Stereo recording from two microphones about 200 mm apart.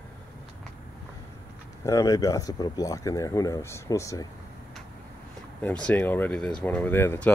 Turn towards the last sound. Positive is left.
turn(degrees=10)  # may be behind; listen again after turning